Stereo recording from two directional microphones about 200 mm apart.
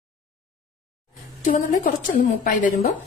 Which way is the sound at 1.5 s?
40° left (ahead or behind).